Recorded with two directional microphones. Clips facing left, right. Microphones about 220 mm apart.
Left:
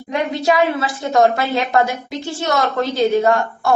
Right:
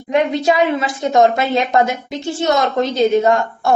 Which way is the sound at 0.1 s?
20° right (ahead or behind).